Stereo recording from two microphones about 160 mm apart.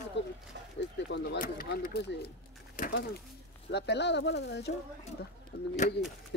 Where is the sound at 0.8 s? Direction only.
90° left.